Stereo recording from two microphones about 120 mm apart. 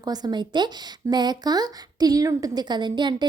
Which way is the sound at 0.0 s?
35° right (ahead or behind).